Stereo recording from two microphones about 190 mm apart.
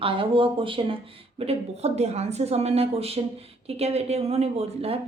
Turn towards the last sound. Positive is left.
turn(degrees=-30)  # may be behind; listen again after turning